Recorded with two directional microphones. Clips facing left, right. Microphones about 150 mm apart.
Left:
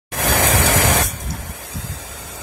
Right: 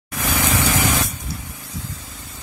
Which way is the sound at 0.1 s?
70° left (ahead or behind).